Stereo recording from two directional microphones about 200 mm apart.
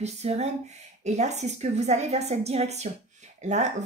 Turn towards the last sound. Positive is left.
turn(degrees=-35)  # may be behind; listen again after turning